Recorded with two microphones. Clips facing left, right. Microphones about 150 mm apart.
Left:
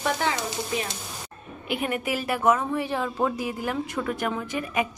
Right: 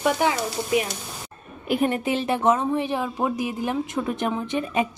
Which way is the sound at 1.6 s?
35° right (ahead or behind).